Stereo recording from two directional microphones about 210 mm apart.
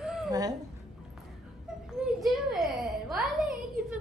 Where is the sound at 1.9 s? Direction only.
Centre (ahead or behind).